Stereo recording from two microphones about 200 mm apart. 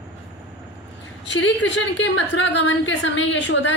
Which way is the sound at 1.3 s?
65° left (ahead or behind).